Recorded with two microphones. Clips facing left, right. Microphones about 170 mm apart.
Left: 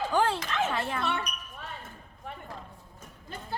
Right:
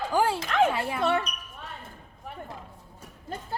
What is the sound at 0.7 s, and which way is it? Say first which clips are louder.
Music: right 2 dB; 10° right (ahead or behind).